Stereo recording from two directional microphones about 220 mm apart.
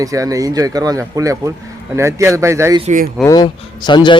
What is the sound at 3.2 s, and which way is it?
Speech, 20° left (ahead or behind).